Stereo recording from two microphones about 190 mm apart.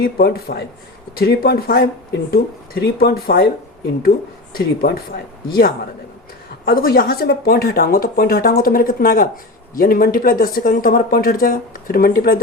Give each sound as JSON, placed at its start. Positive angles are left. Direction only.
{"t": 0.0, "sound": "speech", "side_deg": 55}
{"t": 4.5, "sound": "speech", "side_deg": 50}